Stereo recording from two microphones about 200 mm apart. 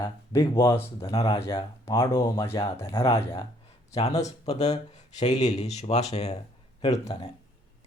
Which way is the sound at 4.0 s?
35° left (ahead or behind).